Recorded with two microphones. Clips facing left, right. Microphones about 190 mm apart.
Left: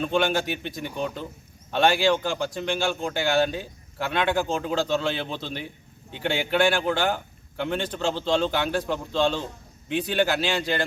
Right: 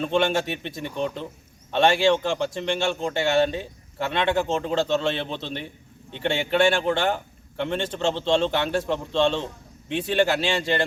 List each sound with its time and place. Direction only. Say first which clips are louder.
0.0 s a man's voice: right 1 dB; 5° left (ahead or behind)